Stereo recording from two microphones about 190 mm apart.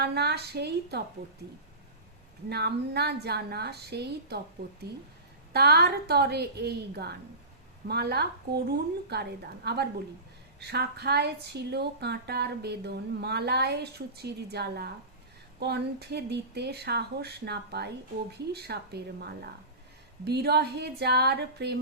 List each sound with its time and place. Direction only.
0.0 s speech: 60° right (ahead or behind)
2.5 s speech: 60° right (ahead or behind)